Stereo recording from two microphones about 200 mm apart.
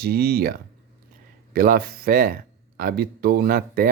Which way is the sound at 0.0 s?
50° right (ahead or behind).